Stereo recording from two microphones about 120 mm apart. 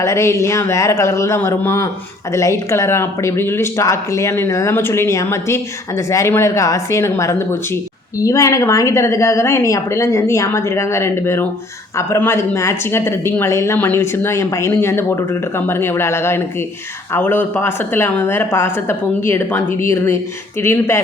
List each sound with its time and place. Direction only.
0.0 s speech: 25° left (ahead or behind)